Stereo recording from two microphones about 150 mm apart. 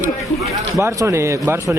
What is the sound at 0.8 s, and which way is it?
Speech, 20° right (ahead or behind).